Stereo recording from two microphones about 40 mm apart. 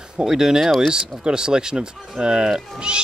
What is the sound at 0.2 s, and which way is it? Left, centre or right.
Speech, centre.